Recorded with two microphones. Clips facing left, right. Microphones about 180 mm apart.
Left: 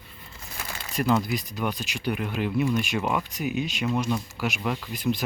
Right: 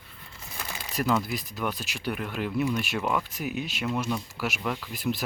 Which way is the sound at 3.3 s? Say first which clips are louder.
Left 4 dB; centre (ahead or behind).